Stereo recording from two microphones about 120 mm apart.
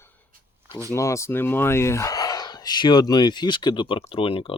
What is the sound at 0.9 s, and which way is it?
Speech, 25° left (ahead or behind).